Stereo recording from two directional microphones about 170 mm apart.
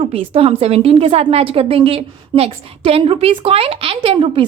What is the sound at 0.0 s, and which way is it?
A woman's voice, 35° right (ahead or behind).